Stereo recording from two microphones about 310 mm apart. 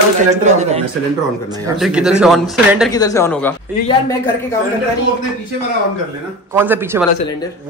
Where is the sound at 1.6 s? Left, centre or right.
Centre.